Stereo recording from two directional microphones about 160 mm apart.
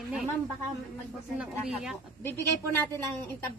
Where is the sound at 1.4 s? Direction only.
5° right (ahead or behind).